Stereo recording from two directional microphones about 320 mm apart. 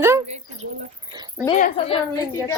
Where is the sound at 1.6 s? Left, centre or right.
Centre.